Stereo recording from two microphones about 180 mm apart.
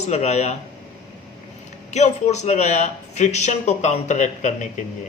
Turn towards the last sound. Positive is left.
turn(degrees=40)  # may be behind; listen again after turning